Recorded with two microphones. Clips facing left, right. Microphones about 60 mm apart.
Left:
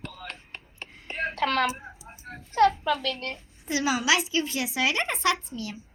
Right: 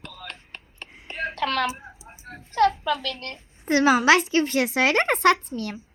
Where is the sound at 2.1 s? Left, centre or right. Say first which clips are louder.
Even; centre.